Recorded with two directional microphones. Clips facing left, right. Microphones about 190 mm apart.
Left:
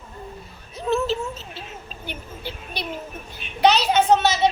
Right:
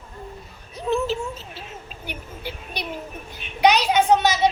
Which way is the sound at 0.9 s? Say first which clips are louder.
Left 1 dB; 15° right (ahead or behind).